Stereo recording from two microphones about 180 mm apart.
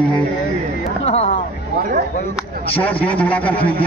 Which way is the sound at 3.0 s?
30° left (ahead or behind).